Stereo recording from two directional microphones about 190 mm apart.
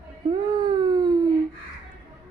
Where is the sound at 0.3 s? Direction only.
25° right (ahead or behind).